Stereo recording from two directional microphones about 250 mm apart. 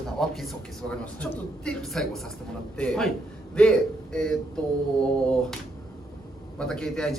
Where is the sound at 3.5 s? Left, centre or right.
Centre.